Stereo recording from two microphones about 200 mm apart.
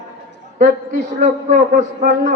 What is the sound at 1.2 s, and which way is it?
A man's voice, 40° right (ahead or behind).